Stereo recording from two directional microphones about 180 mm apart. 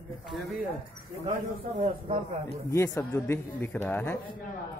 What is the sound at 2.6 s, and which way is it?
Speech, 15° left (ahead or behind).